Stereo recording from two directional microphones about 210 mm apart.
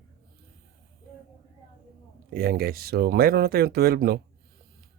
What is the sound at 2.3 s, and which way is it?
Speech, 45° right (ahead or behind).